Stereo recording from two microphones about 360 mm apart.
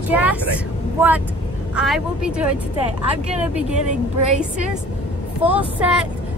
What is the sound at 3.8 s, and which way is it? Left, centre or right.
Speech, centre.